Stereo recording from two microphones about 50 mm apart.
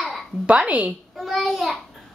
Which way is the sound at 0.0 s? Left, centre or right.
Centre.